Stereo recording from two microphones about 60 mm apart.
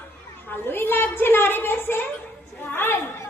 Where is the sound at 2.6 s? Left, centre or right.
Left.